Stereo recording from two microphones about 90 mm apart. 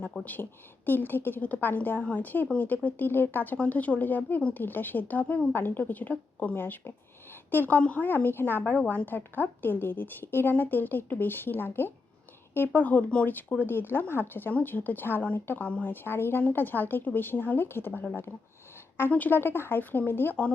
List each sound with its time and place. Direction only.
0.1 s a woman's voice: 10° left (ahead or behind)
0.9 s a woman's voice: 20° left (ahead or behind)
8.8 s a woman's voice: 10° left (ahead or behind)
9.0 s a woman's voice: 20° left (ahead or behind)